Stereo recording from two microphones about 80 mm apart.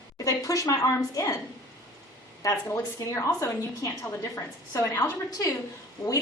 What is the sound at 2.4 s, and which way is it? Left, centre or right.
A woman's voice, left.